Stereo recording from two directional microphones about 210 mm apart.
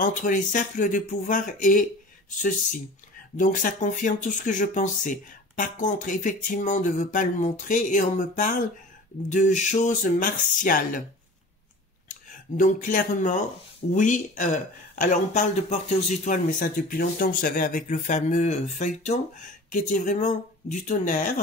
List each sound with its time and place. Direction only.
0.0 s a man's voice: 40° left (ahead or behind)
12.1 s a man's voice: 40° left (ahead or behind)